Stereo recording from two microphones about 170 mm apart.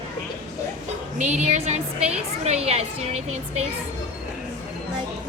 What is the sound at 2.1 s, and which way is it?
Speech, 35° right (ahead or behind).